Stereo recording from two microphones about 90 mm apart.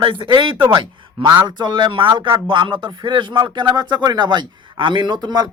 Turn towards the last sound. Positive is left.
turn(degrees=-55)  # may be behind; listen again after turning